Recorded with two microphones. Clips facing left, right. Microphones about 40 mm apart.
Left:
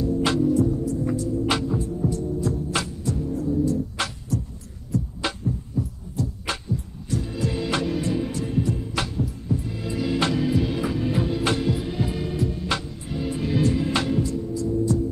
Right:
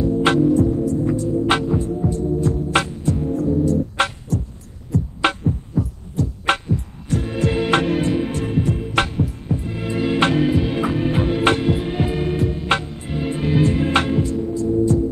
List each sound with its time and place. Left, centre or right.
0.0 s music: right